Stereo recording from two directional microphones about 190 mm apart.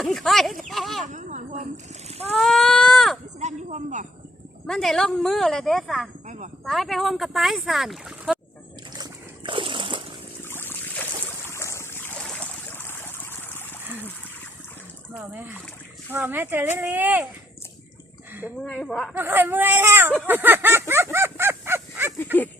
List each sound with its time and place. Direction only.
0.0 s speech: centre (ahead or behind)
1.0 s a sound: 40° right (ahead or behind)
2.3 s speech: centre (ahead or behind)
3.4 s speech: 40° right (ahead or behind)
4.6 s speech: centre (ahead or behind)
6.2 s speech: 40° right (ahead or behind)
6.7 s speech: centre (ahead or behind)
9.0 s splash: 25° right (ahead or behind)
10.5 s boat: 10° left (ahead or behind)
15.1 s speech: 10° right (ahead or behind)
18.6 s speech: 5° left (ahead or behind)
19.1 s speech: 10° right (ahead or behind)
20.2 s a sound: 10° right (ahead or behind)